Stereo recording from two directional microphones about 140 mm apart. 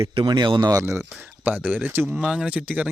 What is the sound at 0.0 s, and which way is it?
Speech, 40° right (ahead or behind).